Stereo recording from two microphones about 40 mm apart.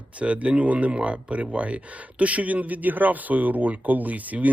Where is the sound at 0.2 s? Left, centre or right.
Right.